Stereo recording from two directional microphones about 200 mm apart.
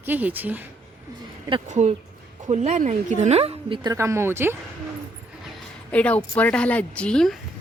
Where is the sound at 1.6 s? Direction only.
35° right (ahead or behind).